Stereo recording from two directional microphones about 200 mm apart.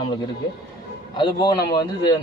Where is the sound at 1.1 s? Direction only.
20° left (ahead or behind).